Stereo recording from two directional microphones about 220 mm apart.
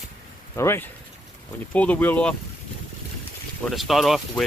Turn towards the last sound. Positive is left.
turn(degrees=0)  # may be behind; listen again after turning